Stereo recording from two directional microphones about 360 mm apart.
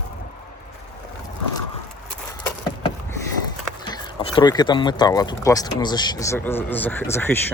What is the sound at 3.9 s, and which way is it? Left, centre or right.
Speech, centre.